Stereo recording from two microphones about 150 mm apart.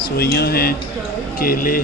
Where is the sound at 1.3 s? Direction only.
75° left (ahead or behind).